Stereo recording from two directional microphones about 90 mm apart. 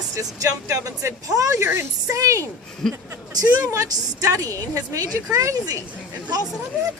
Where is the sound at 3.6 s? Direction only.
40° right (ahead or behind).